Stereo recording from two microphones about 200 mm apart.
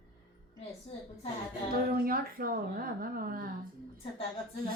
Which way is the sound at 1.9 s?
45° right (ahead or behind).